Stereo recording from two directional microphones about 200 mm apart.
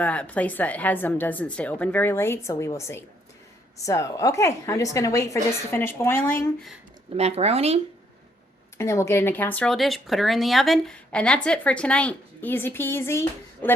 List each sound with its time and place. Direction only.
0.0 s a woman's voice: 5° left (ahead or behind)
7.2 s speech: 30° right (ahead or behind)
8.8 s a woman's voice: 15° left (ahead or behind)